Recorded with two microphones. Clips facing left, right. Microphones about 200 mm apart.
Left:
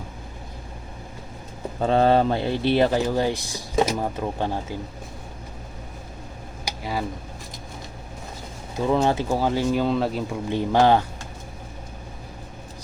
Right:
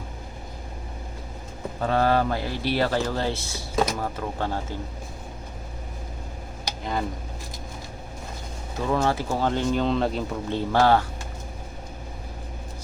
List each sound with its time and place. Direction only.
1.8 s speech: 25° left (ahead or behind)
6.7 s a sound: 5° left (ahead or behind)
8.9 s speech: 20° left (ahead or behind); by 10.6 s 5° left (ahead or behind)
10.6 s speech: 15° left (ahead or behind)